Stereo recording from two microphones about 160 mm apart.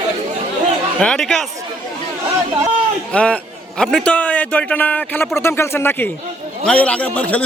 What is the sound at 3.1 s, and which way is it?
A man's voice, 5° left (ahead or behind).